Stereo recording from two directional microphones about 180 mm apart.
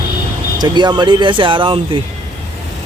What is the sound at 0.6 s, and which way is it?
Speech, 25° right (ahead or behind).